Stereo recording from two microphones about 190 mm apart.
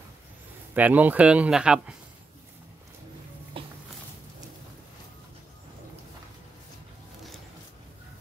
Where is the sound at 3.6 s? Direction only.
30° right (ahead or behind).